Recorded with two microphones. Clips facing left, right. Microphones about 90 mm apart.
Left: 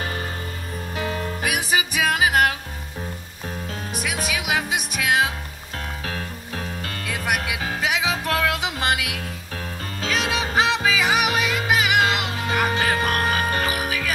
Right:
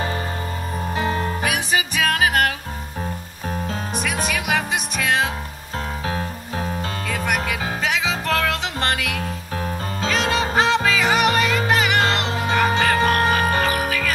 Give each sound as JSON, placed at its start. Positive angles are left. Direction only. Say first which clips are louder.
{"t": 0.9, "sound": "music", "louder": "right 4 dB", "side_deg": -30}
{"t": 1.8, "sound": "music", "louder": "even", "side_deg": 10}
{"t": 4.3, "sound": "music", "louder": "even", "side_deg": 5}
{"t": 6.0, "sound": "music", "louder": "right 5 dB", "side_deg": -25}
{"t": 7.1, "sound": "music", "louder": "right 1 dB", "side_deg": 10}